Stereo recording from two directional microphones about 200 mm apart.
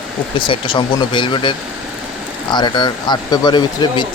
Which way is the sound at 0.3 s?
25° left (ahead or behind).